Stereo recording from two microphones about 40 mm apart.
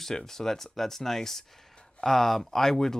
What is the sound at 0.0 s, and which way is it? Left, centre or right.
Speech, centre.